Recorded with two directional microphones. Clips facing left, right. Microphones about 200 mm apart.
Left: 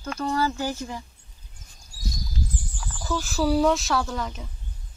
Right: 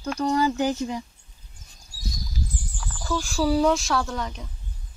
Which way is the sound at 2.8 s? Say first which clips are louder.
Right 1 dB; 5° left (ahead or behind).